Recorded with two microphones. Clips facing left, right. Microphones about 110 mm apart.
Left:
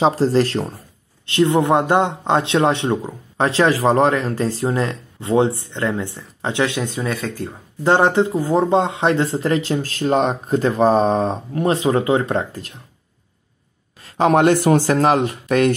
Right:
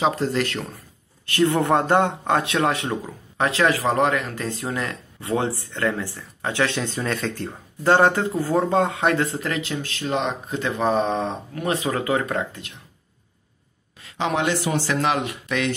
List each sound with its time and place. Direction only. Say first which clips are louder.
0.0 s speech: left 6 dB; 30° left (ahead or behind)
1.2 s speech: left 4 dB; 20° left (ahead or behind)
6.9 s speech: left 2 dB; 5° left (ahead or behind)
7.8 s speech: left 2 dB; 20° left (ahead or behind)
14.0 s speech: left 9 dB; 45° left (ahead or behind)